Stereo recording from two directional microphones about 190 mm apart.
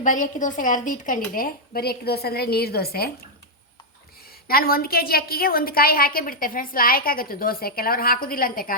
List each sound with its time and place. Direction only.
0.0 s a woman's voice: 45° left (ahead or behind)
4.4 s a woman's voice: 50° left (ahead or behind)